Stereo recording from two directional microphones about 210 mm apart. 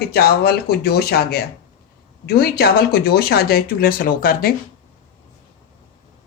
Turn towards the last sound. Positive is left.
turn(degrees=45)  # may be behind; listen again after turning